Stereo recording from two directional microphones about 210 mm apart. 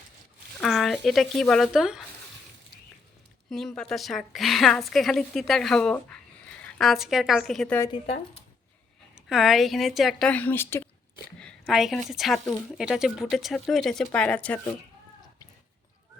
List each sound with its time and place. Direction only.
0.6 s a woman's voice: centre (ahead or behind)
3.7 s a woman's voice: 5° left (ahead or behind)
7.8 s speech: 25° left (ahead or behind)
9.1 s a woman's voice: centre (ahead or behind)
11.3 s a woman's voice: centre (ahead or behind)